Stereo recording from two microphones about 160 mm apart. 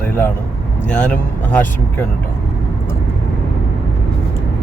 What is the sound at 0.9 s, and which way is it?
Speech, 10° left (ahead or behind).